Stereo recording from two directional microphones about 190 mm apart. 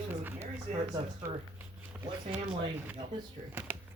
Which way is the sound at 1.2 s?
15° right (ahead or behind).